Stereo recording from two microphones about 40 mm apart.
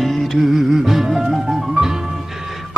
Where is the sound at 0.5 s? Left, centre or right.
Centre.